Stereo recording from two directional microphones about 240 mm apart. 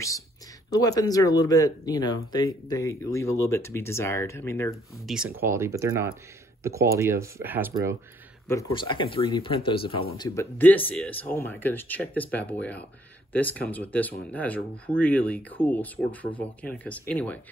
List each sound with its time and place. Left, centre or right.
0.7 s speech: centre
5.0 s speech: centre
8.5 s speech: centre